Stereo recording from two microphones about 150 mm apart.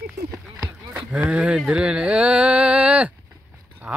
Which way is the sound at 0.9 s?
10° right (ahead or behind).